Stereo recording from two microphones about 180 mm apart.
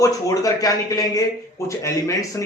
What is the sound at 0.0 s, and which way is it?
A man's voice, 20° left (ahead or behind).